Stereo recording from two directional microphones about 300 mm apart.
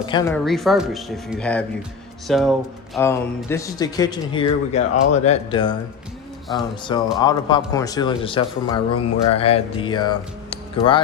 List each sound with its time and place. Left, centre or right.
0.0 s speech: centre
0.4 s speech: centre
7.2 s speech: centre